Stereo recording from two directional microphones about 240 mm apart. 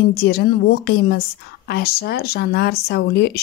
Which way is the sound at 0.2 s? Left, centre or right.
Left.